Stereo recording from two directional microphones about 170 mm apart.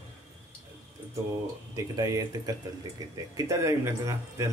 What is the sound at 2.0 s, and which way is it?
Speech, 20° right (ahead or behind).